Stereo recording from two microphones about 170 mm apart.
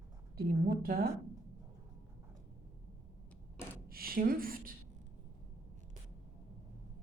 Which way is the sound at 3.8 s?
60° right (ahead or behind).